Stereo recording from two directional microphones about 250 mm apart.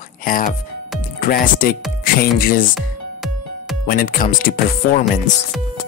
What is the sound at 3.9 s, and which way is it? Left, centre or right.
Speech, left.